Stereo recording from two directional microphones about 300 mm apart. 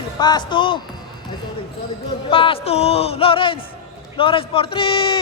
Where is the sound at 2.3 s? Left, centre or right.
Centre.